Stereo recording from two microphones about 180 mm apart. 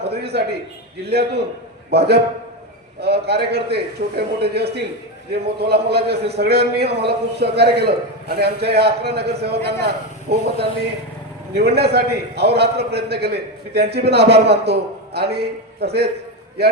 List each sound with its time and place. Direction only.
0.0 s a sound: 65° right (ahead or behind)
1.0 s a man's voice: 65° right (ahead or behind)
11.5 s a man's voice: 65° right (ahead or behind)